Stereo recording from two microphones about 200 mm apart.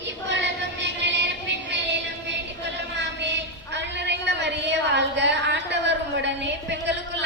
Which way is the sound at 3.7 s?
60° right (ahead or behind).